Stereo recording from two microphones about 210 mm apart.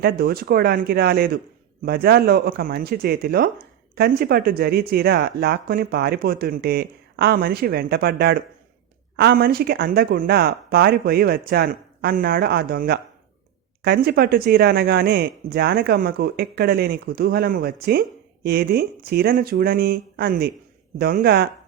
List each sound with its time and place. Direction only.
0.0 s speech: 45° right (ahead or behind)